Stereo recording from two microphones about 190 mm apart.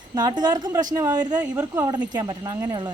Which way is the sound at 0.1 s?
20° right (ahead or behind).